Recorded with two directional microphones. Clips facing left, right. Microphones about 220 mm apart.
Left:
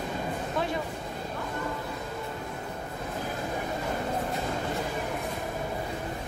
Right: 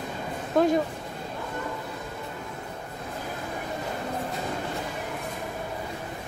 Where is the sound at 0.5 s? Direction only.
45° right (ahead or behind).